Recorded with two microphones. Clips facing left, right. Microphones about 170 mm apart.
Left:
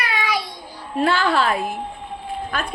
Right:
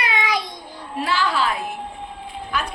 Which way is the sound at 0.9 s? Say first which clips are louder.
Left 4 dB; 50° left (ahead or behind).